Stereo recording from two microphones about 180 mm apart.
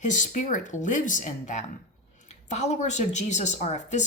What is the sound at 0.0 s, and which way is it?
A woman's voice, 45° left (ahead or behind).